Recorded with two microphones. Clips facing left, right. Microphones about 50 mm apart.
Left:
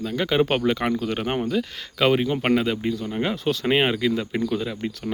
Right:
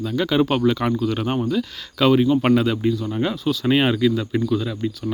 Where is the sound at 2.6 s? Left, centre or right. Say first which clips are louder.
Right 4 dB; centre.